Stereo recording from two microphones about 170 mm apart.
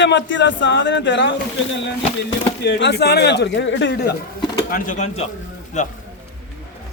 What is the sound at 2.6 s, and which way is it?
Speech, 75° left (ahead or behind).